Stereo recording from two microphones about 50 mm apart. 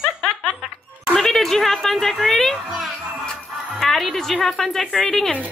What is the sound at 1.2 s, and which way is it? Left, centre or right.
A child's voice, centre.